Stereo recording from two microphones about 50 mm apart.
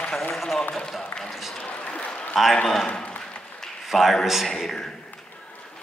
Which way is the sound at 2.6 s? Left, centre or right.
Centre.